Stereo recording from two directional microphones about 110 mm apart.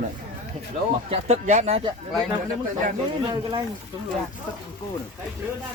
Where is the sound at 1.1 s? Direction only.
90° right.